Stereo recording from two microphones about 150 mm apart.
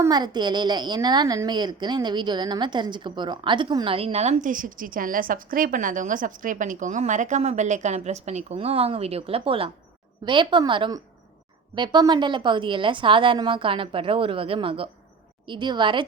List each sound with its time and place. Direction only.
0.0 s a woman's voice: 25° right (ahead or behind)